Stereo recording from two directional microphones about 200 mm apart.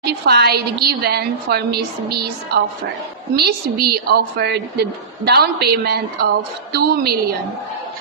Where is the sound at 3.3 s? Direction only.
55° right (ahead or behind).